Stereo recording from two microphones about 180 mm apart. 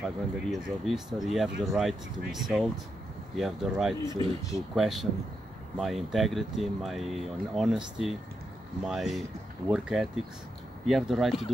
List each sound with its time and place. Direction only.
0.0 s speech: centre (ahead or behind)
4.0 s speech: 25° right (ahead or behind)
4.7 s speech: centre (ahead or behind)